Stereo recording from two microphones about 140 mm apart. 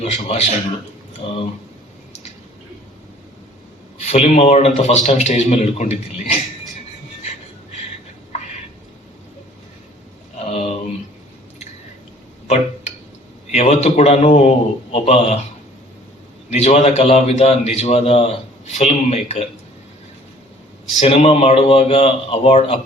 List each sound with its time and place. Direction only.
0.0 s a man's voice: 50° left (ahead or behind)
4.0 s a man's voice: 45° left (ahead or behind)
10.4 s a sound: 40° left (ahead or behind)
13.5 s a man's voice: 50° left (ahead or behind)
16.5 s a man's voice: 50° left (ahead or behind)
21.0 s a man's voice: 45° left (ahead or behind)